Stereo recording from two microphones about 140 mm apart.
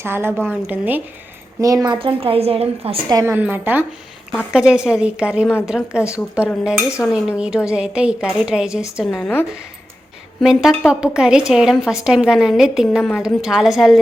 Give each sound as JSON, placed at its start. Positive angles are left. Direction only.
{"t": 0.0, "sound": "a woman's voice", "side_deg": -15}
{"t": 1.6, "sound": "a woman's voice", "side_deg": -25}
{"t": 3.1, "sound": "a woman's voice", "side_deg": -25}
{"t": 3.3, "sound": "a woman's voice", "side_deg": -15}
{"t": 9.0, "sound": "a woman's voice", "side_deg": 5}
{"t": 10.4, "sound": "a woman's voice", "side_deg": -5}